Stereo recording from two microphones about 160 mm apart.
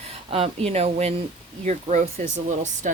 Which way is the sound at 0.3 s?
35° right (ahead or behind).